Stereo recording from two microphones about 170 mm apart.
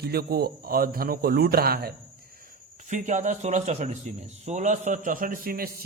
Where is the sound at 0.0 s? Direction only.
70° right (ahead or behind).